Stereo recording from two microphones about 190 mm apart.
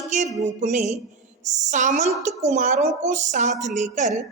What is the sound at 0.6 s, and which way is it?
A woman's voice, 40° right (ahead or behind).